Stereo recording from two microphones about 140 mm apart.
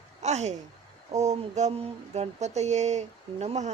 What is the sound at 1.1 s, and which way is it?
Speech, 55° right (ahead or behind).